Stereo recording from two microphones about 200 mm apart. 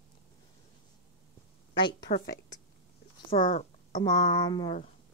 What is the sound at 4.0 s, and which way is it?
Speech, 20° left (ahead or behind).